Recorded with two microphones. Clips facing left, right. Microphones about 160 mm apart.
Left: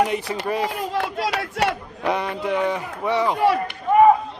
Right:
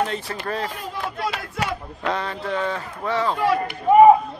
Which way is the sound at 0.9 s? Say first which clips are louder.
Left 3 dB; 80° left.